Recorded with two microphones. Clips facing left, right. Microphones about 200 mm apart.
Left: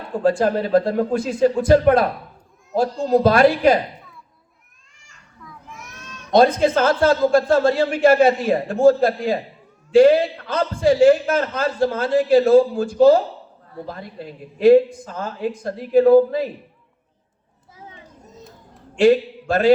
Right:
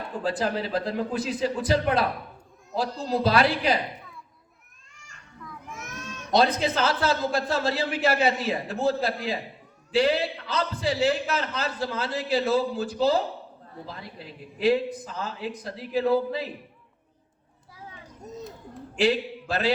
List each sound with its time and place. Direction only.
0.2 s a man's voice: 50° left (ahead or behind)
6.3 s a man's voice: 50° left (ahead or behind)
18.9 s a man's voice: 50° left (ahead or behind)